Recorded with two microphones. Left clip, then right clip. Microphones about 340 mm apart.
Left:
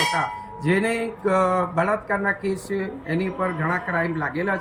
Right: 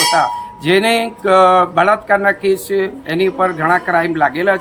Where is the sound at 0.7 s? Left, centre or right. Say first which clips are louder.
Right 10 dB; centre.